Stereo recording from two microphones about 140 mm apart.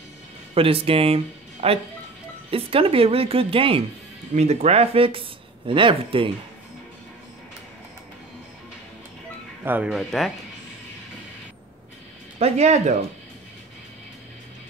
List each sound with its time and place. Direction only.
0.6 s speech: 40° right (ahead or behind)
4.4 s speech: 50° right (ahead or behind)
9.6 s speech: 10° right (ahead or behind)
9.9 s speech: centre (ahead or behind)
12.4 s speech: 50° right (ahead or behind)